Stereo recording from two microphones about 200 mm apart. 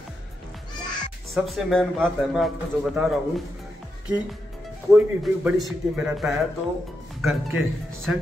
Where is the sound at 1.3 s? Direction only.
Centre (ahead or behind).